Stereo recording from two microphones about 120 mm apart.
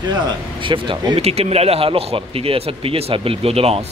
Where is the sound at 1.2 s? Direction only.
60° right (ahead or behind).